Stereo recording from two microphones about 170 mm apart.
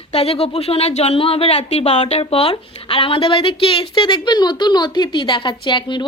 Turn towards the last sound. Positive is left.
turn(degrees=25)  # may be behind; listen again after turning